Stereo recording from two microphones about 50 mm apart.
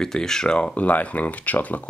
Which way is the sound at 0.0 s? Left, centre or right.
Centre.